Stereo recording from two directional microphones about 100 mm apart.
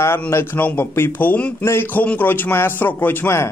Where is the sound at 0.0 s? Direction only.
25° left (ahead or behind).